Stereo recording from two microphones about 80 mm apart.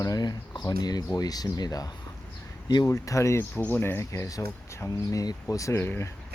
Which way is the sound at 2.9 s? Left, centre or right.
Left.